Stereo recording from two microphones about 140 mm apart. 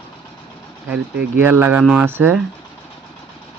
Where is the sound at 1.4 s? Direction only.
15° right (ahead or behind).